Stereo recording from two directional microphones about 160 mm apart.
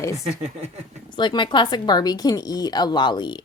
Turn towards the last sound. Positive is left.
turn(degrees=30)  # may be behind; listen again after turning